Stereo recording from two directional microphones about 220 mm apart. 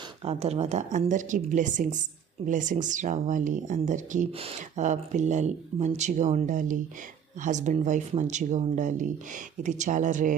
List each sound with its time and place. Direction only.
0.3 s speech: 30° right (ahead or behind)